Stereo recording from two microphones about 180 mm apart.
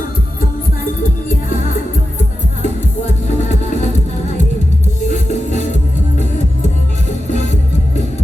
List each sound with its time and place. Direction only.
3.2 s music: 40° left (ahead or behind)
5.0 s music: 40° left (ahead or behind)
7.3 s music: 40° left (ahead or behind)